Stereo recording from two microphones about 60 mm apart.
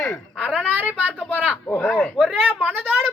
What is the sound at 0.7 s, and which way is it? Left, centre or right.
Speech, right.